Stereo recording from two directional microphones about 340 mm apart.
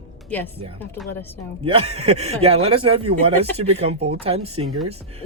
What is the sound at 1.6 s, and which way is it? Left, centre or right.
Speech, centre.